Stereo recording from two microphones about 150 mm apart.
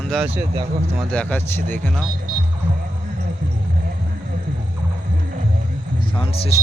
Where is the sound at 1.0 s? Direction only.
10° left (ahead or behind).